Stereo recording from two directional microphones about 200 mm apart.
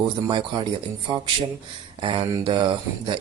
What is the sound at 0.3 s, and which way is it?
Speech, 25° right (ahead or behind).